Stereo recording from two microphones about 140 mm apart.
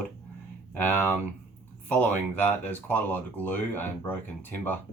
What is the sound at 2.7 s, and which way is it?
Speech, 10° left (ahead or behind).